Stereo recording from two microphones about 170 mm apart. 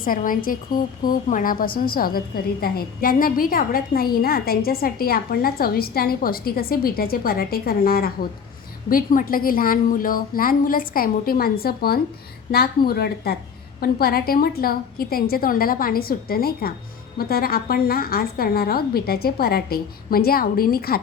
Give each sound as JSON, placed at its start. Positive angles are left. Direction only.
{"t": 0.0, "sound": "a woman's voice", "side_deg": 55}